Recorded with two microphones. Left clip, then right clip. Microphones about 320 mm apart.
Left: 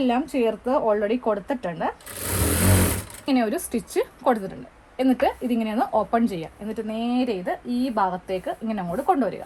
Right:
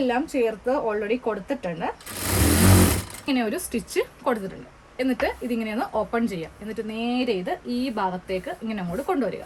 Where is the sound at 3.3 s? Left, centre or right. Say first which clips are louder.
Left 2 dB; centre.